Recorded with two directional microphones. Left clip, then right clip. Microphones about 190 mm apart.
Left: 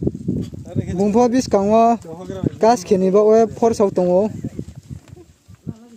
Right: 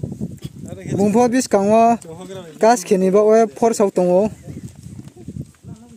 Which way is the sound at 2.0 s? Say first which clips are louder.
Left 2 dB; 40° left (ahead or behind).